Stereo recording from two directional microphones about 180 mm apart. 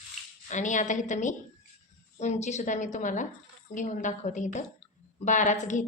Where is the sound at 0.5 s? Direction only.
45° left (ahead or behind).